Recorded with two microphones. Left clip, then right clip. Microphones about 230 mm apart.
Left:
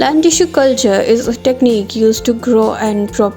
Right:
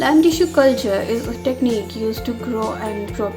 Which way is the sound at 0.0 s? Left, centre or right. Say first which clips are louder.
Left 4 dB; left.